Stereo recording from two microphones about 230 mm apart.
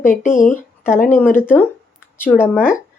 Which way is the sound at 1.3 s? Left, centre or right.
Centre.